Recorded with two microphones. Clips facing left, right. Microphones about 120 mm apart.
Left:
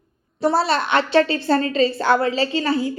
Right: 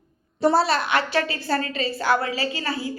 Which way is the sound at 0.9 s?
25° left (ahead or behind).